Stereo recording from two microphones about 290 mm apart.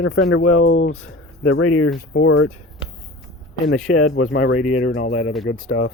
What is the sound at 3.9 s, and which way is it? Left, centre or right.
Speech, left.